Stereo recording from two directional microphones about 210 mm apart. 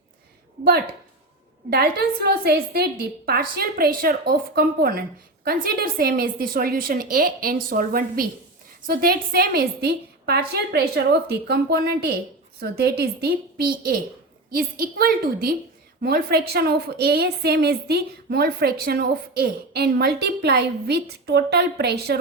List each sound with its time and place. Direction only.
1.7 s a woman's voice: 50° right (ahead or behind)